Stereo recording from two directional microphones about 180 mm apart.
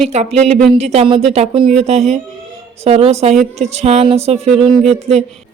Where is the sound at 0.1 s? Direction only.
35° right (ahead or behind).